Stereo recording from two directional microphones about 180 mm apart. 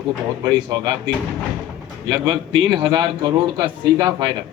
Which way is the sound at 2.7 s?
25° right (ahead or behind).